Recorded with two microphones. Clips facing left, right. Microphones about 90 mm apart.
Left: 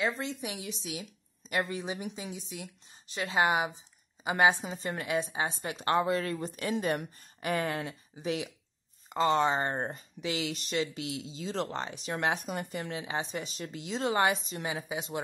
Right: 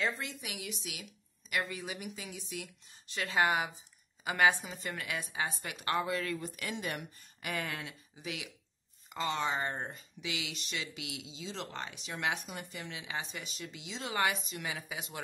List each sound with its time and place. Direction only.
0.2 s speech: 30° left (ahead or behind)